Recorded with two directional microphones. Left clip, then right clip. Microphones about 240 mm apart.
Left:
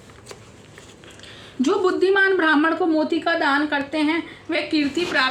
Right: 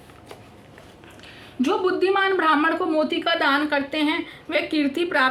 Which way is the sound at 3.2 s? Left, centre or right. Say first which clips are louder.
Even; right.